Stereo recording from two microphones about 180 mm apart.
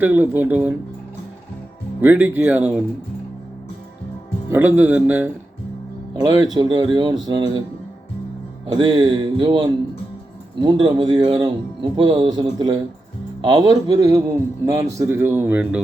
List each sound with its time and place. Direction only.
0.0 s a man's voice: 10° right (ahead or behind)
2.0 s a man's voice: 10° right (ahead or behind)
4.5 s a man's voice: 10° right (ahead or behind)
6.1 s speech: 20° right (ahead or behind)
8.6 s a man's voice: 25° right (ahead or behind); by 15.8 s 10° right (ahead or behind)